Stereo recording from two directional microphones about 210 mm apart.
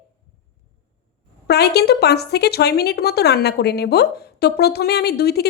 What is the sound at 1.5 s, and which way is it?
Speech, 50° left (ahead or behind).